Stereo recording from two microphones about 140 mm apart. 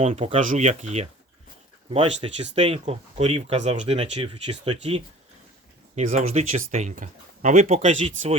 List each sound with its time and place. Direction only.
0.0 s speech: 50° right (ahead or behind)
1.9 s speech: 40° right (ahead or behind)
4.8 s speech: 45° right (ahead or behind)